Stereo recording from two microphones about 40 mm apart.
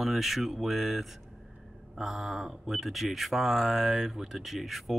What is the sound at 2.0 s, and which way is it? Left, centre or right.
Speech, centre.